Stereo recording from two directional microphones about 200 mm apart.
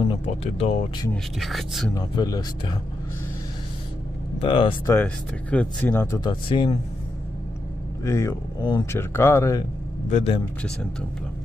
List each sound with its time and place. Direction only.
0.0 s speech: 30° left (ahead or behind)
1.1 s speech: centre (ahead or behind)
2.0 s speech: 20° left (ahead or behind)
4.4 s speech: 25° left (ahead or behind)
4.9 s speech: 5° left (ahead or behind); by 6.8 s 25° left (ahead or behind)
8.0 s speech: 15° left (ahead or behind)
10.0 s a man's voice: 35° left (ahead or behind)
10.6 s speech: 5° left (ahead or behind)